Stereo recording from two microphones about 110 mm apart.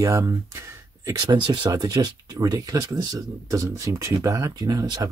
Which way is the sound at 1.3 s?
45° right (ahead or behind).